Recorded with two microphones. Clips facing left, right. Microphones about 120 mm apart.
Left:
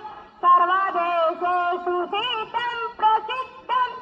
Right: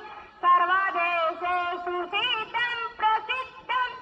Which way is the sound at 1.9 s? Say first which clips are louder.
Left 6 dB; 25° left (ahead or behind).